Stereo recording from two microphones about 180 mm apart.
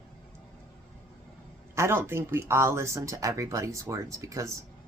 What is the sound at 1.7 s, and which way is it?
Speech, 15° right (ahead or behind).